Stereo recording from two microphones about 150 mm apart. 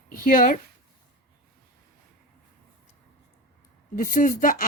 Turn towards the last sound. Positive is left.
turn(degrees=60)  # may be behind; listen again after turning